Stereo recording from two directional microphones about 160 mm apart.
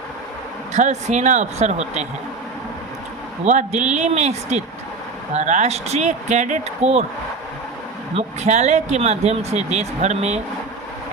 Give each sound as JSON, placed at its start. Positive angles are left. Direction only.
{"t": 0.7, "sound": "speech", "side_deg": -45}
{"t": 3.4, "sound": "speech", "side_deg": -45}
{"t": 8.1, "sound": "speech", "side_deg": -45}